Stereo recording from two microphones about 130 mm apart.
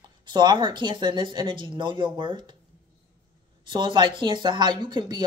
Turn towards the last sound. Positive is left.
turn(degrees=-35)  # may be behind; listen again after turning